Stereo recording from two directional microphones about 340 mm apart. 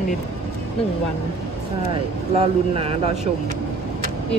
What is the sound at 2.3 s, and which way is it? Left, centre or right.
Speech, centre.